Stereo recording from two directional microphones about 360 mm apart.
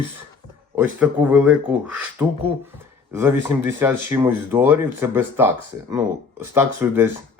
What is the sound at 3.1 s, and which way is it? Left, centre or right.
Speech, centre.